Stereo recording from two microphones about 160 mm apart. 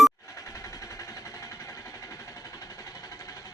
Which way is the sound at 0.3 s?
20° left (ahead or behind).